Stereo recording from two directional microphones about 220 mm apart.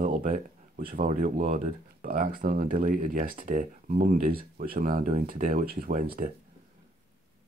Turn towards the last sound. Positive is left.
turn(degrees=-40)  # may be behind; listen again after turning